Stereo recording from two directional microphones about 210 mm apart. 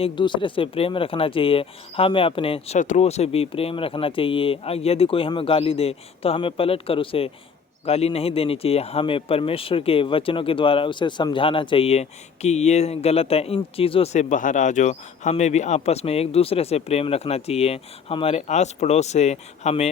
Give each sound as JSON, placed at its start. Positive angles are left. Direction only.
{"t": 0.0, "sound": "speech", "side_deg": 20}